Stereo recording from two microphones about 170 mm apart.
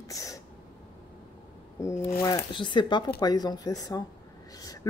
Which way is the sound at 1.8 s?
20° left (ahead or behind).